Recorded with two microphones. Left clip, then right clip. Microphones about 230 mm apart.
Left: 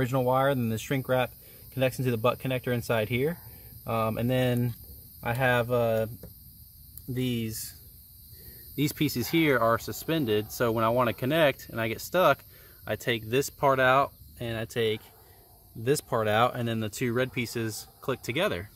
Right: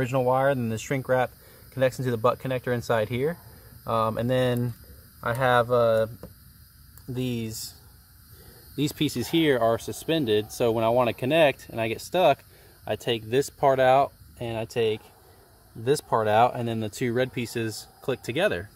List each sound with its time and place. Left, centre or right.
0.0 s speech: centre
2.9 s speech: left
5.3 s speech: centre
7.2 s speech: centre
8.7 s speech: centre